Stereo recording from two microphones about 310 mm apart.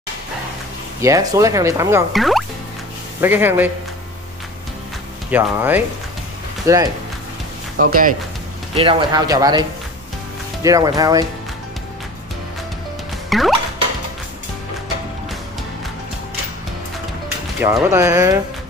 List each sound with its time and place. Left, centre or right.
1.0 s speech: centre
5.3 s speech: centre
7.7 s speech: right
8.7 s speech: centre
13.3 s music: centre
17.6 s speech: centre